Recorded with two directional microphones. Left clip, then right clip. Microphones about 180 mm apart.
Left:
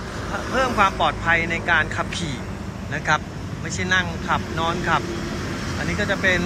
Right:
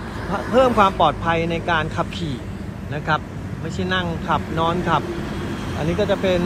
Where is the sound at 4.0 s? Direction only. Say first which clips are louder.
Right 1 dB; 20° left (ahead or behind).